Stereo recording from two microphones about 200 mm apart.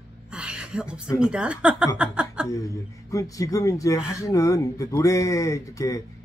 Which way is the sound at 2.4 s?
15° left (ahead or behind).